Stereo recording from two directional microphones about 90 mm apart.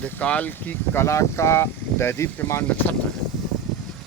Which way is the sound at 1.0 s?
30° left (ahead or behind).